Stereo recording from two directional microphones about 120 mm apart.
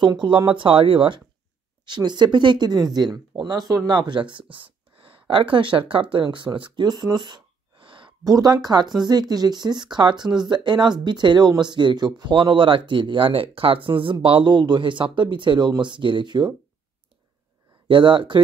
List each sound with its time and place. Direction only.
0.0 s speech: 40° right (ahead or behind)
8.2 s speech: 30° right (ahead or behind)
17.8 s speech: 40° right (ahead or behind)